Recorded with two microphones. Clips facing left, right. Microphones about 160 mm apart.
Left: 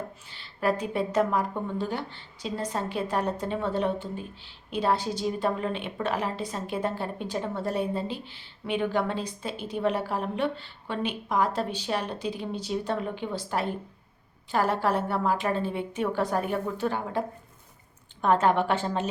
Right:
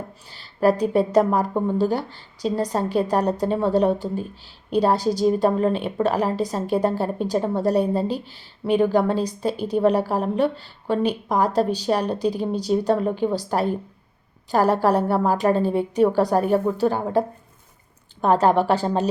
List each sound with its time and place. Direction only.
0.3 s a woman's voice: 40° right (ahead or behind)